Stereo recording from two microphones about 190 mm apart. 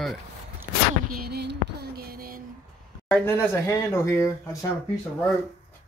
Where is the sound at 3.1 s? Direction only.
10° left (ahead or behind).